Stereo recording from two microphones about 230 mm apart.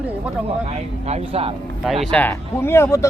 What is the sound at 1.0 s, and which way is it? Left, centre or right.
Speech, right.